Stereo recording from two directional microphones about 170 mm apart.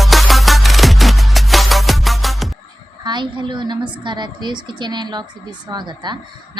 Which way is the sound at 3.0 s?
25° right (ahead or behind).